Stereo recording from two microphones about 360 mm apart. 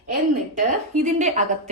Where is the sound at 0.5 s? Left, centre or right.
Right.